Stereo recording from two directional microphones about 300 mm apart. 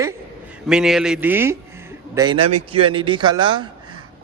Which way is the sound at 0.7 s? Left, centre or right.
Centre.